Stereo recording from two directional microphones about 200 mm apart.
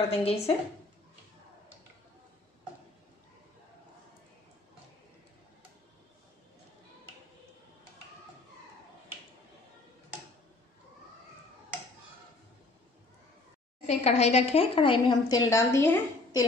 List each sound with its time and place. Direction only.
0.1 s a woman's voice: 30° left (ahead or behind)
13.8 s a woman's voice: 35° left (ahead or behind); by 16.4 s 15° left (ahead or behind)